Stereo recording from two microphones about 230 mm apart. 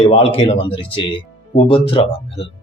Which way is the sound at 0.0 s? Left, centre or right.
Left.